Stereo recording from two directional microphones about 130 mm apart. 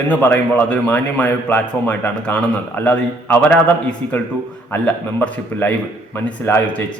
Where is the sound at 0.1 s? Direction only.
10° left (ahead or behind).